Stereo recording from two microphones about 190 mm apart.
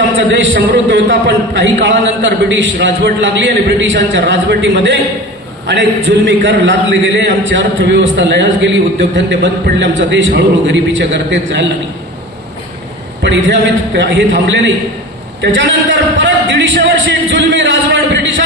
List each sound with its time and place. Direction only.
0.3 s a man's voice: 70° right (ahead or behind)
13.2 s a man's voice: 75° right (ahead or behind)